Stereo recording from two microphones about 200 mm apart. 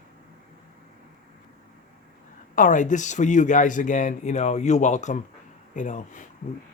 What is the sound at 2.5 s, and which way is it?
Speech, 40° left (ahead or behind).